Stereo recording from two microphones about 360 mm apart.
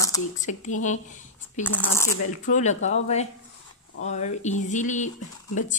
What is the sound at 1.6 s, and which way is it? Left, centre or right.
Speech, centre.